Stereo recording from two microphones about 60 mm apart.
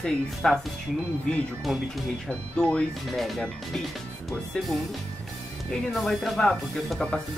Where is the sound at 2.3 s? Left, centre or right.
Centre.